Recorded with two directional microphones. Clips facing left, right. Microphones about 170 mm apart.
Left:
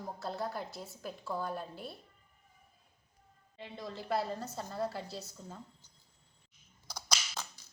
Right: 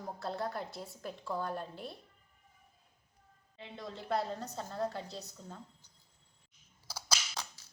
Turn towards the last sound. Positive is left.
turn(degrees=-5)  # may be behind; listen again after turning